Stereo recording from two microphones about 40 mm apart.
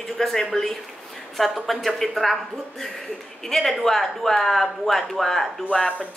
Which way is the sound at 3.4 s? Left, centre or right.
Centre.